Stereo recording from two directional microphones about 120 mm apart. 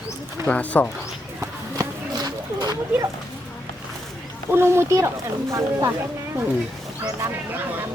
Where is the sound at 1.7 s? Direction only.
30° right (ahead or behind).